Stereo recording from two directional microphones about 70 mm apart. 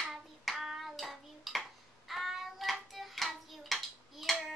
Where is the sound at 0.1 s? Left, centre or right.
Centre.